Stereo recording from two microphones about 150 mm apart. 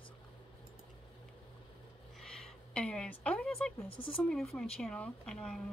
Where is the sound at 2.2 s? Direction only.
5° left (ahead or behind).